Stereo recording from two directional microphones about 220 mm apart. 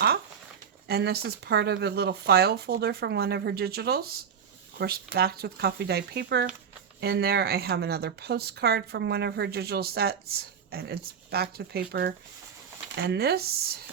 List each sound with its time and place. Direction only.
0.9 s speech: 45° right (ahead or behind)